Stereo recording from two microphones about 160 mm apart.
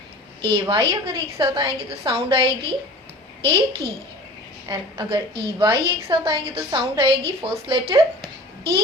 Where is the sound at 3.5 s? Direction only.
35° right (ahead or behind).